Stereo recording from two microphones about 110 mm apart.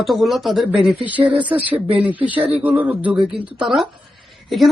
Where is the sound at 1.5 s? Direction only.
15° right (ahead or behind).